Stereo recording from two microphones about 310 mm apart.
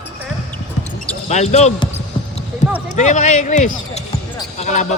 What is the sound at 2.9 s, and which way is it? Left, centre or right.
Speech, left.